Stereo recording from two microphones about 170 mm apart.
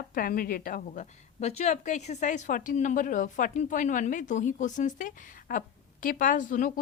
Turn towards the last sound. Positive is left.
turn(degrees=50)  # may be behind; listen again after turning